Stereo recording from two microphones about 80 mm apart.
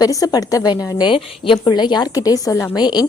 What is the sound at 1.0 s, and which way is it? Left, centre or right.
A woman's voice, left.